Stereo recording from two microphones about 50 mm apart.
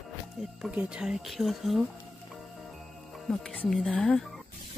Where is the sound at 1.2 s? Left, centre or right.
Centre.